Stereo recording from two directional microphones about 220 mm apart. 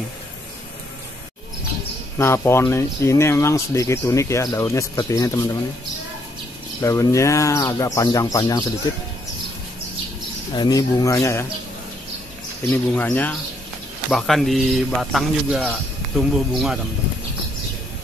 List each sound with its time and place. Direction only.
2.1 s speech: 10° left (ahead or behind)
6.8 s speech: 15° left (ahead or behind)
10.5 s speech: 20° left (ahead or behind)
12.7 s speech: 10° left (ahead or behind)